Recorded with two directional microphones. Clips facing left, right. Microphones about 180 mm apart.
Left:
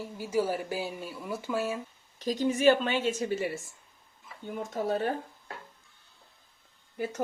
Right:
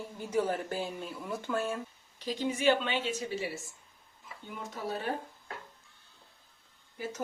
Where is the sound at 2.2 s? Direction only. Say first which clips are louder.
Left 5 dB; 45° left (ahead or behind).